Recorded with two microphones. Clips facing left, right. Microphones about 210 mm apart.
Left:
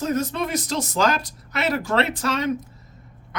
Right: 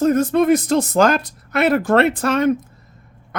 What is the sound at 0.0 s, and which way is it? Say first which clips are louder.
Speech: right 9 dB; 50° right (ahead or behind).